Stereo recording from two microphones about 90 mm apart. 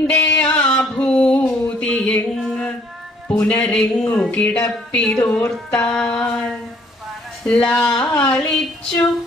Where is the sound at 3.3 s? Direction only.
15° left (ahead or behind).